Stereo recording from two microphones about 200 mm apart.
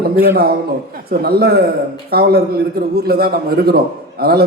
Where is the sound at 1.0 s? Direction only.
50° right (ahead or behind).